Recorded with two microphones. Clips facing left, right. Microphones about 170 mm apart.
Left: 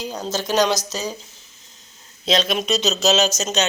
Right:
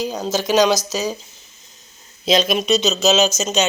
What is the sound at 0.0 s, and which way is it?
Speech, 5° right (ahead or behind).